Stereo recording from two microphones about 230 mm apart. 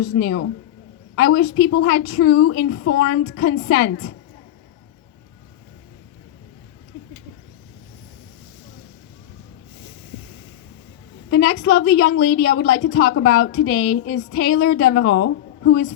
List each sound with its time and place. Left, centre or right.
0.2 s a woman's voice: left
11.3 s a woman's voice: left